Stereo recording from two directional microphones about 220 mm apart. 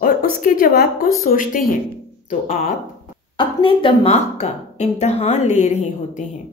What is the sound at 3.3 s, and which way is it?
A woman's voice, 25° left (ahead or behind).